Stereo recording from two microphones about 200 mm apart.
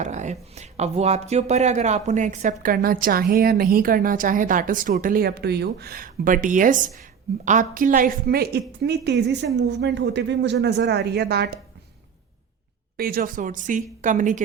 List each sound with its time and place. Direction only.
0.0 s speech: 35° right (ahead or behind); by 11.6 s 55° right (ahead or behind)
13.0 s speech: 45° right (ahead or behind)